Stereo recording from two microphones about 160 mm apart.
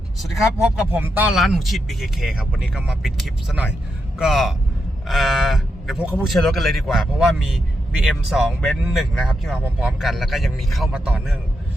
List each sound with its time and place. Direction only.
0.9 s speech: 10° right (ahead or behind)